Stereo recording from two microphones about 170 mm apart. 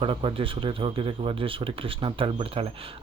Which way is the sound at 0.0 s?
30° right (ahead or behind).